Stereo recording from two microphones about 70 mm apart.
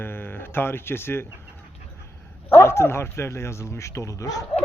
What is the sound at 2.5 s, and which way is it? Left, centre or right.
Speech, left.